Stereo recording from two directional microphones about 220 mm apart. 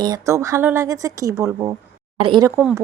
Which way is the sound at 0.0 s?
15° right (ahead or behind).